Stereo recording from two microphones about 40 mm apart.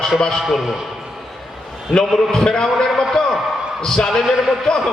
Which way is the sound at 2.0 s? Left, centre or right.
Centre.